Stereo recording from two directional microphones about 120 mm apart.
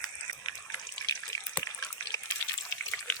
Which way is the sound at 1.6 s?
30° left (ahead or behind).